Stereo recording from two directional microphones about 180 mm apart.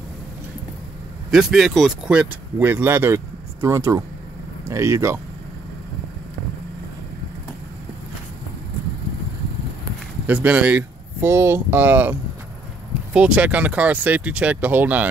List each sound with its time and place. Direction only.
1.3 s speech: centre (ahead or behind)
10.2 s speech: 10° right (ahead or behind)